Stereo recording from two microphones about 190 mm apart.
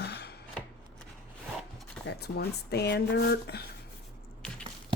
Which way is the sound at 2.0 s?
60° left (ahead or behind).